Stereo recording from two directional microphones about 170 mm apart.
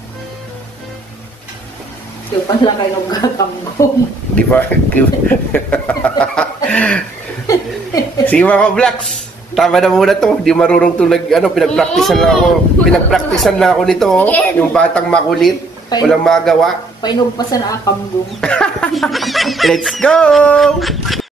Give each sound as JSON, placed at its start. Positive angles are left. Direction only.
{"t": 2.4, "sound": "a man's voice", "side_deg": 20}
{"t": 8.3, "sound": "a man's voice", "side_deg": 10}
{"t": 17.0, "sound": "speech", "side_deg": 25}
{"t": 18.4, "sound": "a man's voice", "side_deg": 5}